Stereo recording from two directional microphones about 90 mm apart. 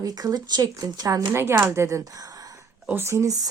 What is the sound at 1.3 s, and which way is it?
Speech, 25° right (ahead or behind).